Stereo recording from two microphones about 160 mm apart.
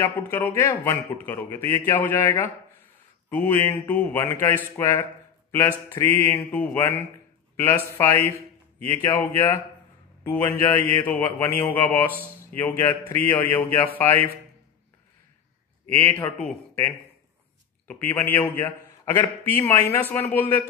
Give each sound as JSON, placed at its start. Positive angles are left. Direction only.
{"t": 0.0, "sound": "a man's voice", "side_deg": 15}
{"t": 15.9, "sound": "a man's voice", "side_deg": 10}